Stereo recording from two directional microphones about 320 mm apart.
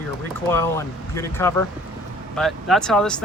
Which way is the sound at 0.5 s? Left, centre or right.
Centre.